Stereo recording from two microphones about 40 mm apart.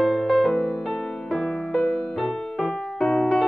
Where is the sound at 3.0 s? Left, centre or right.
Left.